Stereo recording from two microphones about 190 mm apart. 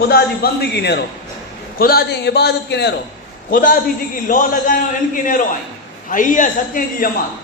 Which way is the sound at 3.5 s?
45° left (ahead or behind).